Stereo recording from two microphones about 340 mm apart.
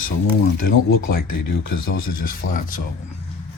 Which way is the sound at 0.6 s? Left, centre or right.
Left.